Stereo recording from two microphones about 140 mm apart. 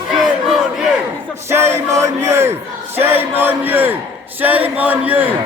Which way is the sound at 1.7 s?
20° right (ahead or behind).